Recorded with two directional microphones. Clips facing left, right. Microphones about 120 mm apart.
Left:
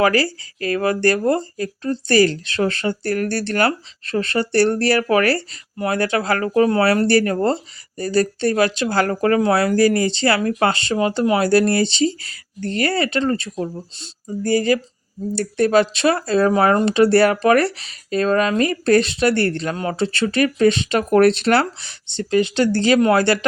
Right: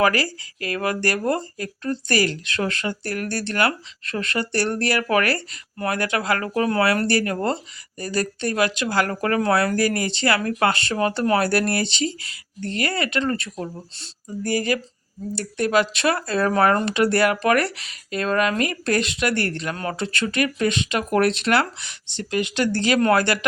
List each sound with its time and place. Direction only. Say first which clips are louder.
0.0 s speech: left 3 dB; 30° left (ahead or behind)